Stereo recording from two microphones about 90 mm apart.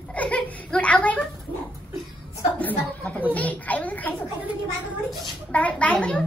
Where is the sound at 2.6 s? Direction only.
15° left (ahead or behind).